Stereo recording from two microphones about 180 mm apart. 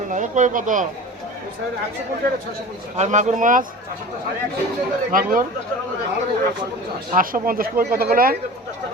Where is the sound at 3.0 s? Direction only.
45° right (ahead or behind).